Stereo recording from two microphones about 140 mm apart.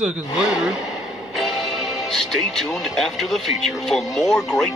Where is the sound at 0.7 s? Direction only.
25° left (ahead or behind).